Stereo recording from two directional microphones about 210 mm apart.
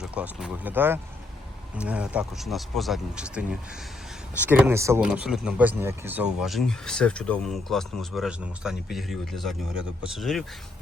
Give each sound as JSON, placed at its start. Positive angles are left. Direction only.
{"t": 0.0, "sound": "speech", "side_deg": -5}